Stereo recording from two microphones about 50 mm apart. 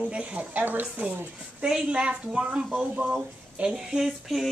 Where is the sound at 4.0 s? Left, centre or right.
Centre.